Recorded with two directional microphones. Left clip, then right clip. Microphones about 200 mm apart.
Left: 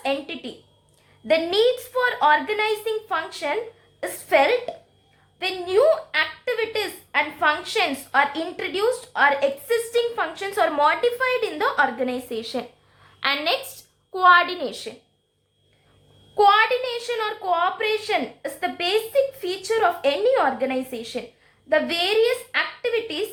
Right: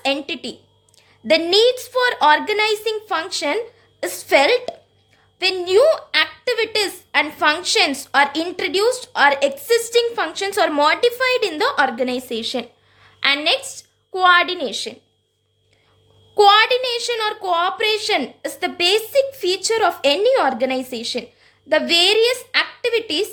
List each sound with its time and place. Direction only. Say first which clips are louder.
0.0 s a woman's voice: right 4 dB; 50° right (ahead or behind)
16.3 s a woman's voice: right 4 dB; 45° right (ahead or behind)